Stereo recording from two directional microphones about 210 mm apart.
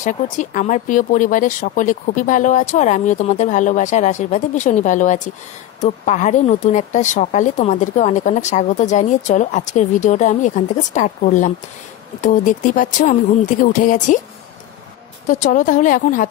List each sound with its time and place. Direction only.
0.0 s a woman's voice: 40° left (ahead or behind)
15.2 s a woman's voice: 35° left (ahead or behind)